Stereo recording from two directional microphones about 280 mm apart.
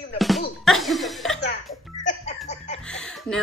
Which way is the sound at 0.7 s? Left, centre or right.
Centre.